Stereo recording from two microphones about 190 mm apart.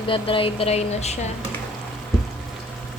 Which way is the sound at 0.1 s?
25° left (ahead or behind).